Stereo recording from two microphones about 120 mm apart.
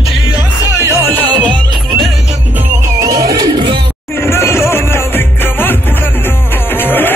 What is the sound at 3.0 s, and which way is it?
Music, 30° right (ahead or behind).